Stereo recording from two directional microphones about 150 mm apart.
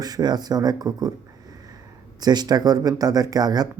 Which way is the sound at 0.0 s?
25° right (ahead or behind).